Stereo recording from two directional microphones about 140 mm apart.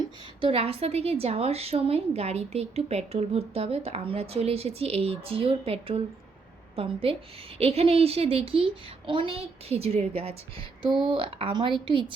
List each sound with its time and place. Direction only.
0.0 s a woman's voice: 40° right (ahead or behind)